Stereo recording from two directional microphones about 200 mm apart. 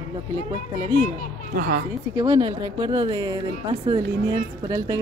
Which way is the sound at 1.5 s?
50° right (ahead or behind).